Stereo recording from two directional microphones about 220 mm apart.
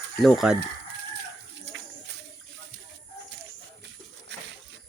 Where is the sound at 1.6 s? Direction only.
55° right (ahead or behind).